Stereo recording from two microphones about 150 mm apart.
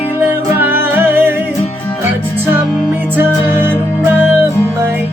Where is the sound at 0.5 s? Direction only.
15° right (ahead or behind).